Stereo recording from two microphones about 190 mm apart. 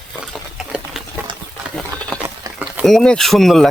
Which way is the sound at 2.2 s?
10° right (ahead or behind).